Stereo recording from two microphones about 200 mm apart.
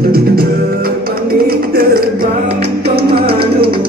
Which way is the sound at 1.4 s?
50° right (ahead or behind).